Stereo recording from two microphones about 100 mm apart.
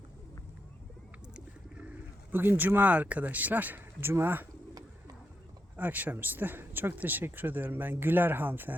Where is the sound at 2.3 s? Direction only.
20° right (ahead or behind).